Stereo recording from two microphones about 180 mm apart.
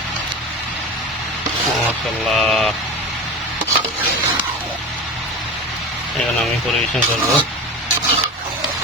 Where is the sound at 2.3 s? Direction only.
Centre (ahead or behind).